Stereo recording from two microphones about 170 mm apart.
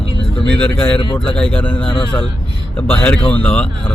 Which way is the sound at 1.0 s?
30° left (ahead or behind).